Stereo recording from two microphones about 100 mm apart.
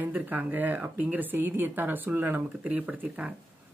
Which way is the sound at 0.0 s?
15° right (ahead or behind).